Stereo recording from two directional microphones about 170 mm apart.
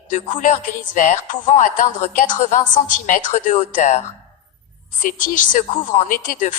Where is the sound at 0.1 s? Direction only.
50° left (ahead or behind).